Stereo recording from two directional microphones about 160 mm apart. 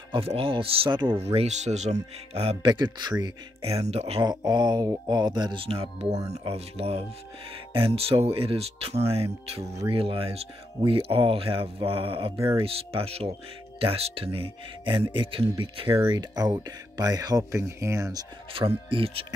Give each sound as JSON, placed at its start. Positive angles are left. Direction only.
{"t": 0.1, "sound": "speech", "side_deg": -35}
{"t": 1.2, "sound": "speech", "side_deg": -40}
{"t": 2.6, "sound": "speech", "side_deg": -30}
{"t": 3.7, "sound": "speech", "side_deg": -40}
{"t": 4.2, "sound": "speech", "side_deg": -25}
{"t": 15.9, "sound": "speech", "side_deg": -20}
{"t": 18.5, "sound": "speech", "side_deg": -35}